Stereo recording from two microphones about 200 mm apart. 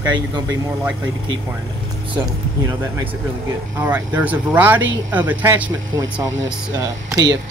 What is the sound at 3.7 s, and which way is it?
Speech, 10° right (ahead or behind).